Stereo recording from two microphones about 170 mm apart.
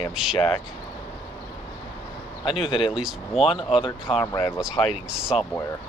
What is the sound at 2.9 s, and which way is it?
Speech, 5° right (ahead or behind).